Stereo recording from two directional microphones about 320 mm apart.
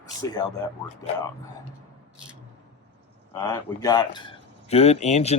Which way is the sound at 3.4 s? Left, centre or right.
Centre.